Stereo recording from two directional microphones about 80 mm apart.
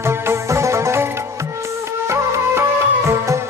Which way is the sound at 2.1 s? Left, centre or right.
Right.